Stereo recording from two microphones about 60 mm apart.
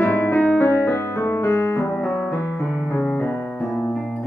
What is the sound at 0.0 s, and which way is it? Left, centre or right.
Music, left.